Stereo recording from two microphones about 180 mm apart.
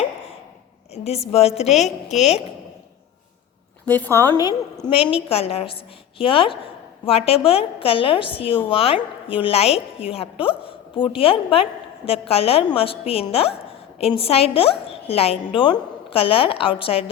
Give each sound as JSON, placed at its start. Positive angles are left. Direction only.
{"t": 1.0, "sound": "a woman's voice", "side_deg": 35}
{"t": 3.8, "sound": "a woman's voice", "side_deg": 10}